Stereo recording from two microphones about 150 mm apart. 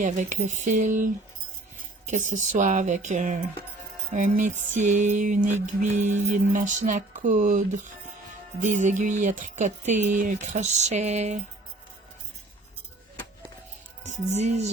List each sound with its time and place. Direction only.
0.0 s music: 55° right (ahead or behind)
14.0 s speech: 50° right (ahead or behind)